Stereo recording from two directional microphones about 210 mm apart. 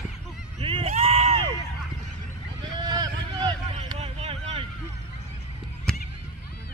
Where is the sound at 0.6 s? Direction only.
25° right (ahead or behind).